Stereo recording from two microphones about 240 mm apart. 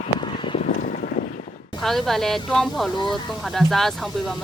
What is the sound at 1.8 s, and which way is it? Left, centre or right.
Speech, centre.